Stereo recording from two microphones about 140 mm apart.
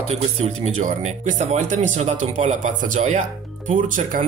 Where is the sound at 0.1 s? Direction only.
50° right (ahead or behind).